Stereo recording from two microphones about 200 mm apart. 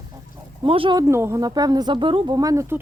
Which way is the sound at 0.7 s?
25° right (ahead or behind).